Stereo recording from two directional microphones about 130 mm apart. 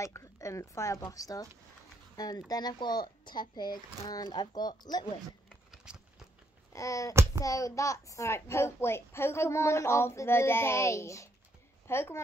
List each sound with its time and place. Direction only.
0.0 s a child's voice: 25° left (ahead or behind)
5.9 s biting: 5° right (ahead or behind)
6.7 s a sound: 25° left (ahead or behind)
7.4 s a child's voice: 25° left (ahead or behind)